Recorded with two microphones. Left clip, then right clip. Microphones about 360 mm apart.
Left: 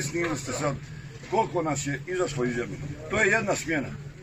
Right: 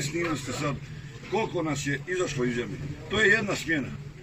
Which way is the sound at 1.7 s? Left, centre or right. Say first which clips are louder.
Even; centre.